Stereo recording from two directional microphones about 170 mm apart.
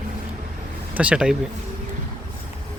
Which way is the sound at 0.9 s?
5° right (ahead or behind).